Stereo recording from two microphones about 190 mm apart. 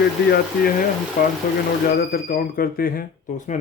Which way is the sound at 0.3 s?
55° left (ahead or behind).